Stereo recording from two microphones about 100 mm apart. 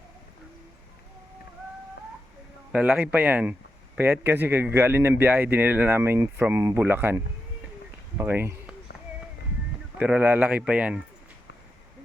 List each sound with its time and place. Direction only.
2.7 s a man's voice: 15° right (ahead or behind)
8.3 s speech: 20° right (ahead or behind)
10.0 s a man's voice: 15° right (ahead or behind)